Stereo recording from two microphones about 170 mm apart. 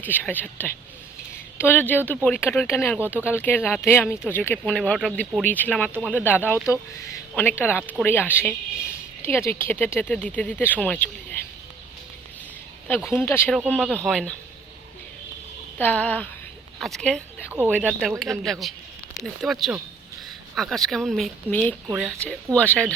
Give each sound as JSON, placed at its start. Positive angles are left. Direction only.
{"t": 0.0, "sound": "speech", "side_deg": 10}
{"t": 13.1, "sound": "speech", "side_deg": 15}
{"t": 13.6, "sound": "speech", "side_deg": -5}
{"t": 15.8, "sound": "speech", "side_deg": 10}